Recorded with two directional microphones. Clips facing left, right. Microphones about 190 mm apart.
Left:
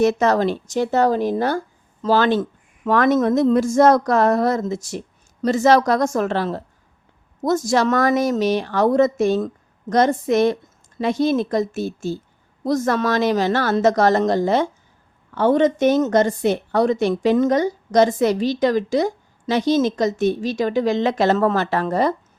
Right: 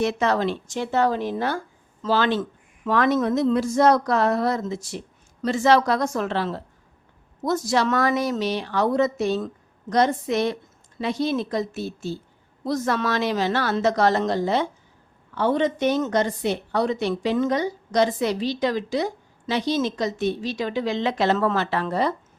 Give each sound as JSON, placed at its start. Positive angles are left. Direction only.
{"t": 0.0, "sound": "a woman's voice", "side_deg": 45}